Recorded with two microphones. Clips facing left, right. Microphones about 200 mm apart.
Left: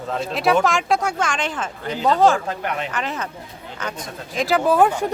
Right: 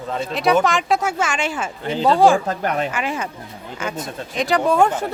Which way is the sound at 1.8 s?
30° right (ahead or behind).